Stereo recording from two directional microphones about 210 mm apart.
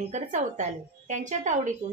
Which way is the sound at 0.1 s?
35° right (ahead or behind).